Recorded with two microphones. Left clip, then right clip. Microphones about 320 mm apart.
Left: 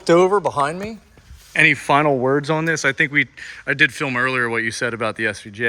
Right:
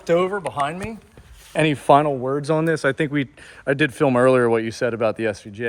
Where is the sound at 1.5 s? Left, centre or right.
Centre.